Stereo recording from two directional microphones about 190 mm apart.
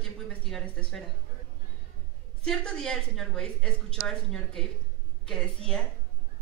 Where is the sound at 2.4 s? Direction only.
5° left (ahead or behind).